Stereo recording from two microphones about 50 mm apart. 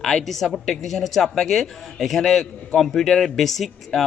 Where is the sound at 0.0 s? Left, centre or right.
Centre.